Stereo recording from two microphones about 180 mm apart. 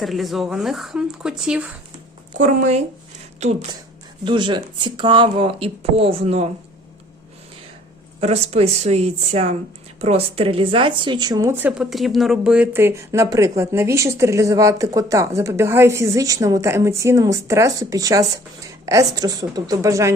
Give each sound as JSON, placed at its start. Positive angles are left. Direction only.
{"t": 0.0, "sound": "speech", "side_deg": 0}
{"t": 2.4, "sound": "a woman's voice", "side_deg": -40}
{"t": 4.3, "sound": "speech", "side_deg": -25}
{"t": 8.2, "sound": "a woman's voice", "side_deg": -35}